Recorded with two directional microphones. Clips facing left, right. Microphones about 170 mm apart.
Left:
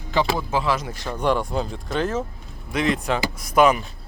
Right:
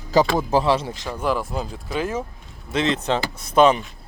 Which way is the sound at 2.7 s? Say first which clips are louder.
Right 1 dB; 25° right (ahead or behind).